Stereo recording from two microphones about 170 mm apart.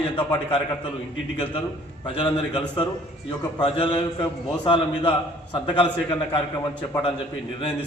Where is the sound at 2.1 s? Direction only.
30° left (ahead or behind).